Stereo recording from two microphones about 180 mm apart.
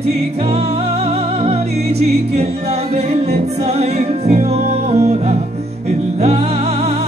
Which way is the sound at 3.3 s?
35° right (ahead or behind).